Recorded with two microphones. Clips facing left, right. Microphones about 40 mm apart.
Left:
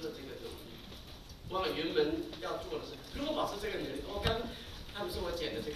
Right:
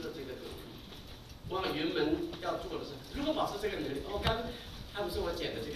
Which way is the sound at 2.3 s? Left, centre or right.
Right.